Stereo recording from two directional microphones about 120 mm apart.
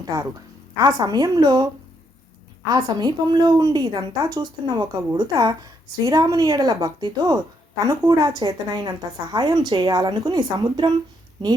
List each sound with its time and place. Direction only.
0.0 s a woman's voice: 30° right (ahead or behind)